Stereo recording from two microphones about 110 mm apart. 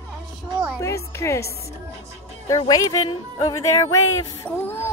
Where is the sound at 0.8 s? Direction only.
25° left (ahead or behind).